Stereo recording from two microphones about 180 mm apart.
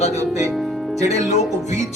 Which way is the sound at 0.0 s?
40° left (ahead or behind).